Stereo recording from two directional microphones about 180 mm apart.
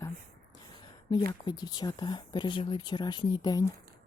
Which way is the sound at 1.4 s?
25° left (ahead or behind).